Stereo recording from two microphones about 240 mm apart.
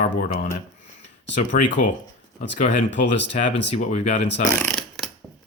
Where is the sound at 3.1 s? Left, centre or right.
Left.